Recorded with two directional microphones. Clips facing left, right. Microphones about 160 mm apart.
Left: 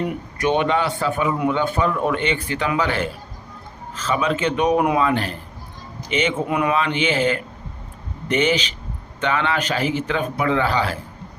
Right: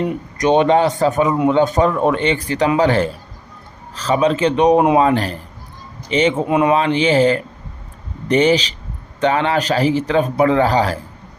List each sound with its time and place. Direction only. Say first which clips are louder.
0.4 s speech: right 6 dB; 25° right (ahead or behind)
0.7 s a man's voice: right 7 dB; 40° right (ahead or behind)